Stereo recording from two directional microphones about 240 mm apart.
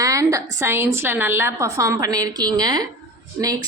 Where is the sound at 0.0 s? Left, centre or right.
Centre.